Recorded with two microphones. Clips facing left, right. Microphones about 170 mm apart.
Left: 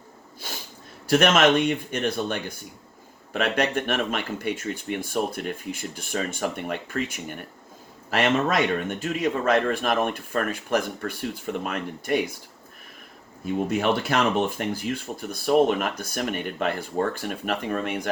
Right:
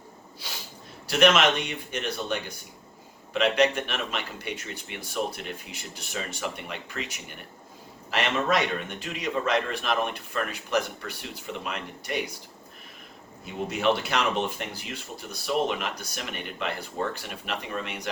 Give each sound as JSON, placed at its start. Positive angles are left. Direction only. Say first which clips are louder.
{"t": 0.4, "sound": "a sound", "louder": "left 4 dB", "side_deg": 50}
{"t": 1.0, "sound": "a man's voice", "louder": "left 3 dB", "side_deg": 50}
{"t": 13.4, "sound": "a man's voice", "louder": "left 3 dB", "side_deg": 50}